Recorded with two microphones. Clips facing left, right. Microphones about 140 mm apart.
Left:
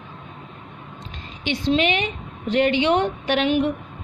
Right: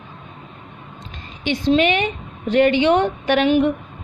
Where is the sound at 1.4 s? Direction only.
50° right (ahead or behind).